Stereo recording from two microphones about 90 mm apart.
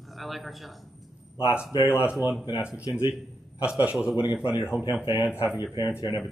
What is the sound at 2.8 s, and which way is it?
Speech, 35° left (ahead or behind).